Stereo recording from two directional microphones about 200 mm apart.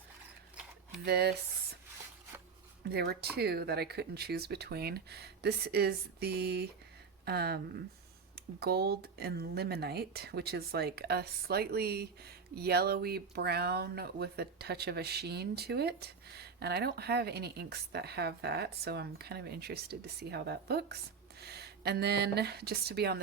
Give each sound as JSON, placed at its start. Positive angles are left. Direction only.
{"t": 1.0, "sound": "speech", "side_deg": -55}
{"t": 2.9, "sound": "speech", "side_deg": -55}